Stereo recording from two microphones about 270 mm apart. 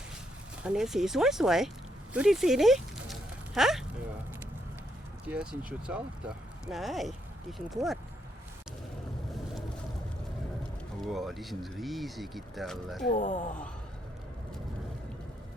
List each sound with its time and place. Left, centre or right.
0.6 s speech: centre
2.1 s a sound: centre
5.2 s speech: centre
11.0 s speech: centre
13.1 s speech: left